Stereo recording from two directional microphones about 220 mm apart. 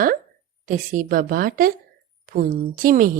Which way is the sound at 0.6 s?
35° right (ahead or behind).